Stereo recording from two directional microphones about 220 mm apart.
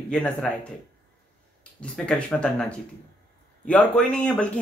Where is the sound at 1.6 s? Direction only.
5° left (ahead or behind).